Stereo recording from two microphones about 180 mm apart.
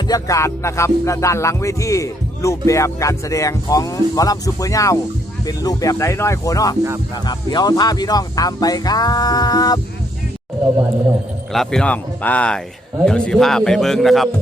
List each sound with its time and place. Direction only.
0.1 s music: 15° left (ahead or behind)
5.5 s speech: 20° left (ahead or behind)
11.5 s speech: centre (ahead or behind)